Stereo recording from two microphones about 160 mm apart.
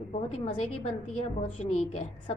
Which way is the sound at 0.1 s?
40° left (ahead or behind).